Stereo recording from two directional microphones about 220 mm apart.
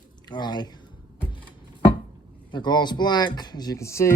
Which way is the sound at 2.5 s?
20° left (ahead or behind).